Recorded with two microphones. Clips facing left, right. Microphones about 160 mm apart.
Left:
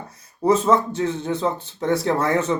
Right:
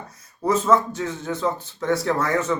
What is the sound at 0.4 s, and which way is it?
Speech, 20° left (ahead or behind).